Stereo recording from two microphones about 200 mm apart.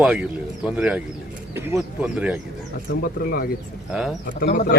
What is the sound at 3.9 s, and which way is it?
Speech, centre (ahead or behind).